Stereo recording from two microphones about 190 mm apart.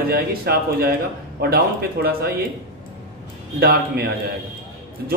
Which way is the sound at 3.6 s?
55° right (ahead or behind).